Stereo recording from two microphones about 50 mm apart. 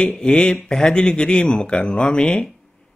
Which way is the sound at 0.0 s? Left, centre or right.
Centre.